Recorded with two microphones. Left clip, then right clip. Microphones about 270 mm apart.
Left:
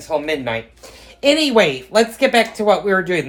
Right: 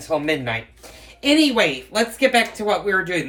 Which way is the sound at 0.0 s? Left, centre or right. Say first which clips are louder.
Left 1 dB; centre.